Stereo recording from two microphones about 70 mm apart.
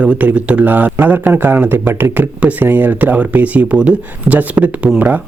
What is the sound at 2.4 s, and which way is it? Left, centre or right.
A man's voice, right.